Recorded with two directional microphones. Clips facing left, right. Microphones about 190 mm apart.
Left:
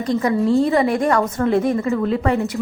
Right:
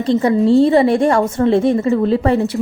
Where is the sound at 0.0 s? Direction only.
30° right (ahead or behind).